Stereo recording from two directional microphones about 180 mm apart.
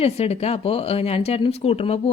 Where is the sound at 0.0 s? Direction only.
35° left (ahead or behind).